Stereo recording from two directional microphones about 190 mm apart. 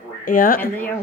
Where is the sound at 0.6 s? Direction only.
10° left (ahead or behind).